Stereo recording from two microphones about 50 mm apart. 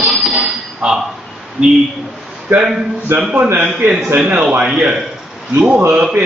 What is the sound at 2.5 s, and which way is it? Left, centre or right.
Speech, right.